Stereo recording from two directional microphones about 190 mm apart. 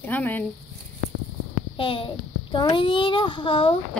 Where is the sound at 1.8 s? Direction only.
30° left (ahead or behind).